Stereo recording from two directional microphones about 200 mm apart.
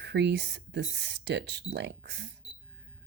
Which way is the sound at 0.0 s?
55° right (ahead or behind).